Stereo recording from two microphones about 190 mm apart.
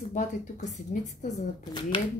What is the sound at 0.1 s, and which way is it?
Speech, 40° left (ahead or behind).